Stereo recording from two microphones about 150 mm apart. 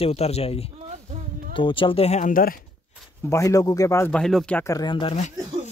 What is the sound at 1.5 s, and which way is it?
Speech, 35° left (ahead or behind).